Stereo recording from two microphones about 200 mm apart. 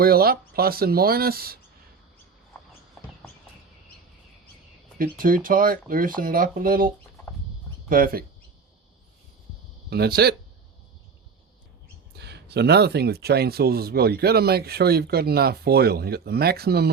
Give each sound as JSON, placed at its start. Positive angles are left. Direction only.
{"t": 0.0, "sound": "speech", "side_deg": -50}
{"t": 4.9, "sound": "speech", "side_deg": -45}
{"t": 9.9, "sound": "speech", "side_deg": -55}
{"t": 12.1, "sound": "speech", "side_deg": -55}